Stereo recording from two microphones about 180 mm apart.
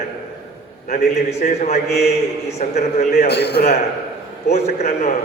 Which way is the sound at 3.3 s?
65° left (ahead or behind).